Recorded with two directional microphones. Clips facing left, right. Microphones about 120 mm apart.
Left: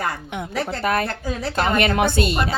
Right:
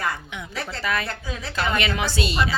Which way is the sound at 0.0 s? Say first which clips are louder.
Left 3 dB; 50° left (ahead or behind).